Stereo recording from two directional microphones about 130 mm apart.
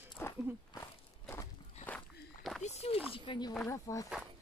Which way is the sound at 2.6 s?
55° left (ahead or behind).